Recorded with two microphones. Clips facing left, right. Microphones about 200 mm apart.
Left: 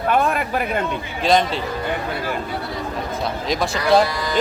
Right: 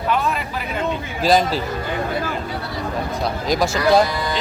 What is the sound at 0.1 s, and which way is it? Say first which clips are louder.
Speech: left 3 dB; 50° left (ahead or behind).